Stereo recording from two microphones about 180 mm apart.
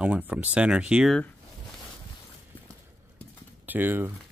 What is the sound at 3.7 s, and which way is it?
Speech, 10° right (ahead or behind).